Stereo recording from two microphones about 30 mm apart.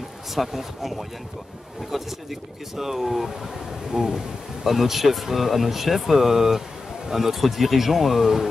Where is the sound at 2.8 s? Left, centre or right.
Centre.